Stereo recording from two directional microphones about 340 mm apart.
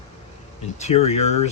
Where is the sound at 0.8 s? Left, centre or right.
Centre.